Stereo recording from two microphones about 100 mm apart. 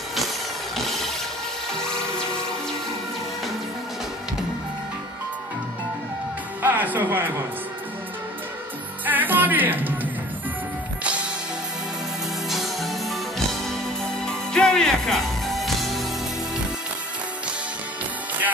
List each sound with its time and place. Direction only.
0.7 s a sound: centre (ahead or behind)
1.8 s music: 5° left (ahead or behind)
6.6 s speech: 15° right (ahead or behind)
9.0 s music: 20° right (ahead or behind)
12.4 s music: centre (ahead or behind)